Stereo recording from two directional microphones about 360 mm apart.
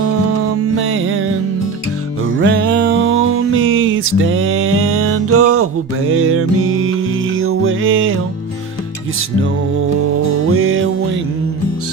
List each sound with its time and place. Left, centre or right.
0.6 s music: right
10.2 s music: right